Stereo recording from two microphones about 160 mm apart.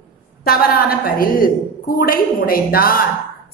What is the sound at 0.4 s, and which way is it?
A woman's voice, 70° left (ahead or behind).